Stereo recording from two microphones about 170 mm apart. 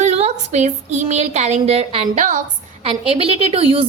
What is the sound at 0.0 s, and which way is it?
Speech, 40° right (ahead or behind).